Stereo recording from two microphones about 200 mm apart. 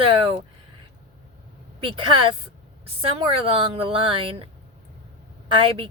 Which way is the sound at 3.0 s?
25° right (ahead or behind).